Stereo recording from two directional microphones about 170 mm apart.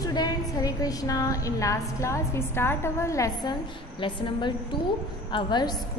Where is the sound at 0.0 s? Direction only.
20° left (ahead or behind).